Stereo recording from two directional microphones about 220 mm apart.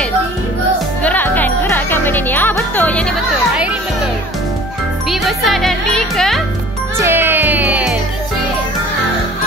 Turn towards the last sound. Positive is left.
turn(degrees=-5)  # may be behind; listen again after turning